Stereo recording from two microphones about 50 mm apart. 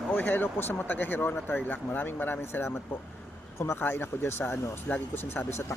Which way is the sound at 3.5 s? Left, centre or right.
Left.